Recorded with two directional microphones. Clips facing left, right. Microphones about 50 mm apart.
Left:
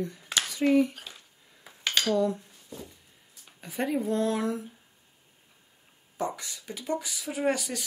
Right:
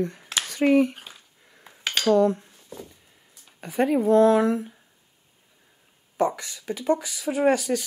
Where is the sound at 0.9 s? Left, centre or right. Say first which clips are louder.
Right 2 dB; right.